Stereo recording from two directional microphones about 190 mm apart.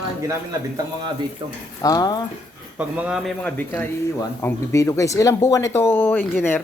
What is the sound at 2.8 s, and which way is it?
Speech, 5° right (ahead or behind).